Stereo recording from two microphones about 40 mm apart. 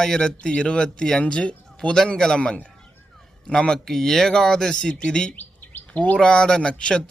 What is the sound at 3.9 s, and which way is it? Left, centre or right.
Speech, centre.